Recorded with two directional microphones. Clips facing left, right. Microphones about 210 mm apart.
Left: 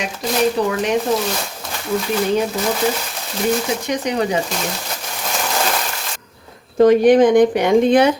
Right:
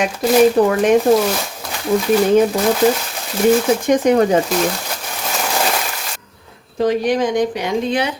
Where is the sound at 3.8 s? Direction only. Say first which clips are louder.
Right 7 dB; 50° right (ahead or behind).